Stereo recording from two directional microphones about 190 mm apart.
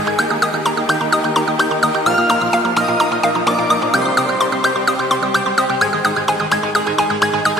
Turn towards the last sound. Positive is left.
turn(degrees=0)  # may be behind; listen again after turning